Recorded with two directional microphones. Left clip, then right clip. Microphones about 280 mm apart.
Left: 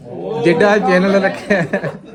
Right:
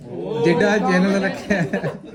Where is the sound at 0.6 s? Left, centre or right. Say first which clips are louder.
Left 9 dB; left.